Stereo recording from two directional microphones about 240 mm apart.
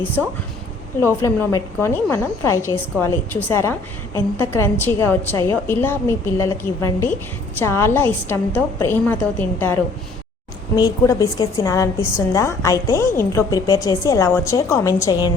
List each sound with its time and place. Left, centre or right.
1.0 s a woman's voice: centre
10.8 s a woman's voice: centre